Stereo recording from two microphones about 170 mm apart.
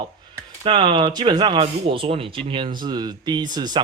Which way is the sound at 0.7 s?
30° right (ahead or behind).